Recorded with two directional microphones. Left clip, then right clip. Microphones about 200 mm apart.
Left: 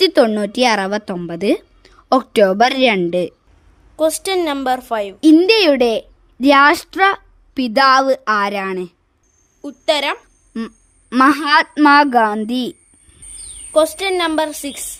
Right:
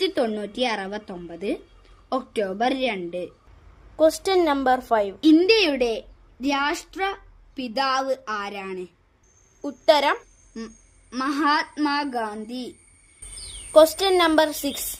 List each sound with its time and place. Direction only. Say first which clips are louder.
0.0 s a woman's voice: left 11 dB; 50° left (ahead or behind)
3.9 s a woman's voice: left 2 dB; 5° left (ahead or behind)
5.2 s a woman's voice: left 8 dB; 40° left (ahead or behind)
9.6 s a woman's voice: left 1 dB; 5° left (ahead or behind)
10.5 s a woman's voice: left 10 dB; 50° left (ahead or behind)
13.7 s a woman's voice: left 1 dB; 5° left (ahead or behind)